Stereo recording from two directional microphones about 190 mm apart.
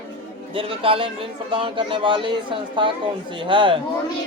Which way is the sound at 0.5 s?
30° right (ahead or behind).